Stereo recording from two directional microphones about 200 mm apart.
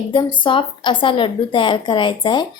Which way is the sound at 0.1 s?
25° left (ahead or behind).